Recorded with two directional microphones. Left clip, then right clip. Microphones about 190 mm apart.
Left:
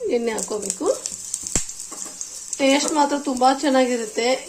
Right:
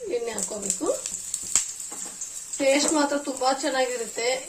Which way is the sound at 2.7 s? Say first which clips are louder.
Left 4 dB; 45° left (ahead or behind).